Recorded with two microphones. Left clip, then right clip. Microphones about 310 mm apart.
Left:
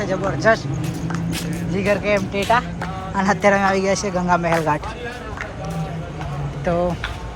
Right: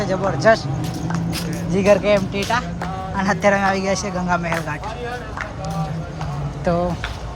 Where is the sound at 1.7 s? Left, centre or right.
Centre.